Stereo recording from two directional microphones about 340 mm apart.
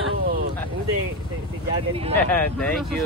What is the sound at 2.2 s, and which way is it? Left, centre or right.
Speech, centre.